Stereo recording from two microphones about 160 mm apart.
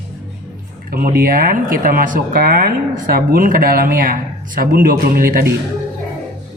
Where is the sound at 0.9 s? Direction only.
65° right (ahead or behind).